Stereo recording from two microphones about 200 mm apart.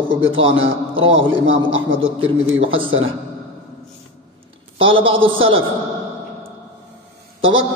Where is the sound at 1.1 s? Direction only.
75° right (ahead or behind).